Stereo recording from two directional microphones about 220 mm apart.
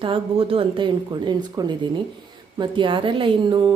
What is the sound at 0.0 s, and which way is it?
A woman's voice, 25° right (ahead or behind).